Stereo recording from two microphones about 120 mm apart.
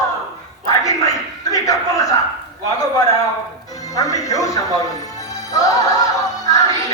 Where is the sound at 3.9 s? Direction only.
30° left (ahead or behind).